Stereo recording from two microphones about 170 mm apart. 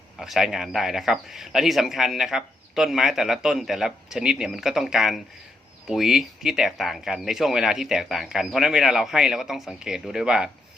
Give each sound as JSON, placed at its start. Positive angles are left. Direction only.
{"t": 0.2, "sound": "speech", "side_deg": -5}